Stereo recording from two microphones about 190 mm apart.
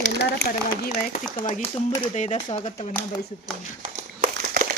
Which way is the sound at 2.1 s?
40° left (ahead or behind).